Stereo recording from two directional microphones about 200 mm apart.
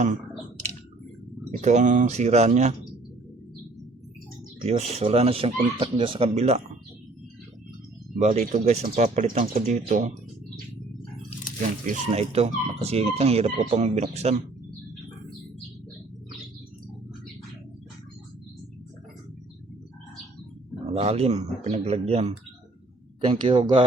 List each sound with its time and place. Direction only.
1.5 s speech: 35° right (ahead or behind)
4.6 s speech: 30° right (ahead or behind)
8.2 s speech: 40° right (ahead or behind)
11.9 s speech: 30° right (ahead or behind)
20.8 s speech: 30° right (ahead or behind)